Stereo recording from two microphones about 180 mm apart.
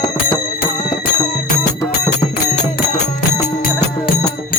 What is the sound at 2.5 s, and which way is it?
Music, 40° left (ahead or behind).